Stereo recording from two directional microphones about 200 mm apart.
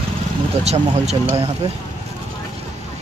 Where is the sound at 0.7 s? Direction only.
30° right (ahead or behind).